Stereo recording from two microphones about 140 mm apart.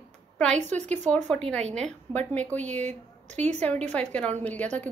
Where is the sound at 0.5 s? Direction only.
55° right (ahead or behind).